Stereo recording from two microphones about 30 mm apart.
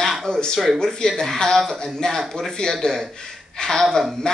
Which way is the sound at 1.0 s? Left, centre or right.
Centre.